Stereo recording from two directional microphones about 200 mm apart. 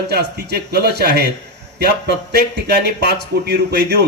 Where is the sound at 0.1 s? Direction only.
55° right (ahead or behind).